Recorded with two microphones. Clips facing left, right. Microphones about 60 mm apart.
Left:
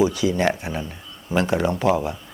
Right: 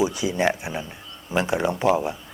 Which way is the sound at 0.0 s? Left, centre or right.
Right.